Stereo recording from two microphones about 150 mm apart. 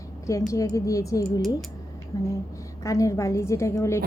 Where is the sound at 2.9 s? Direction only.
20° left (ahead or behind).